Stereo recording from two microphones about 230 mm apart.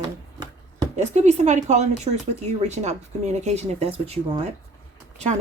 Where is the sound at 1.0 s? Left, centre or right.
Right.